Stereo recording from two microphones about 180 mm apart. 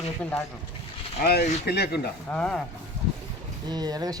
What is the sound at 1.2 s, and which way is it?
Speech, 60° left (ahead or behind).